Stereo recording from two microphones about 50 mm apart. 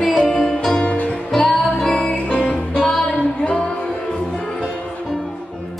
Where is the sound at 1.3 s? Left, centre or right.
Centre.